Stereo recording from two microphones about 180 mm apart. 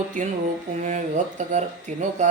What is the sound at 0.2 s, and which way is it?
Speech, 45° right (ahead or behind).